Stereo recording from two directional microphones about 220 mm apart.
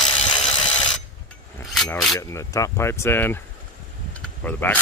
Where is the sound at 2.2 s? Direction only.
15° left (ahead or behind).